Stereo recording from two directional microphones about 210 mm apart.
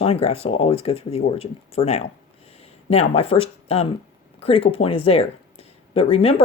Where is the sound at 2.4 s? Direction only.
30° left (ahead or behind).